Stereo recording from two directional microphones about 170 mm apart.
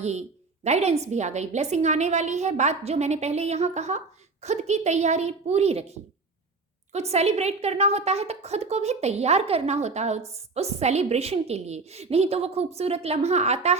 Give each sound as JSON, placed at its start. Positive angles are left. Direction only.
{"t": 0.0, "sound": "a woman's voice", "side_deg": -40}